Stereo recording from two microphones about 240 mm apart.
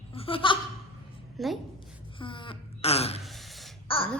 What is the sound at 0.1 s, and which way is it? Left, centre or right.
Laughter, left.